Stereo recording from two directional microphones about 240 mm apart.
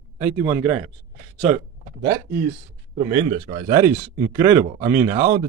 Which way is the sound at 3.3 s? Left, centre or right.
Right.